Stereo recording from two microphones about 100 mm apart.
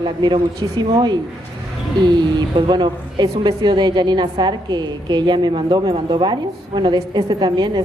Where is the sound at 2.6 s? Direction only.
50° right (ahead or behind).